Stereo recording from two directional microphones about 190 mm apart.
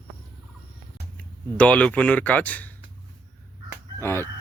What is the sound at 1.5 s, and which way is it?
Speech, 5° left (ahead or behind).